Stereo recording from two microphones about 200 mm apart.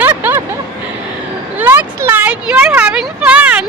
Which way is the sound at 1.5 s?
10° right (ahead or behind).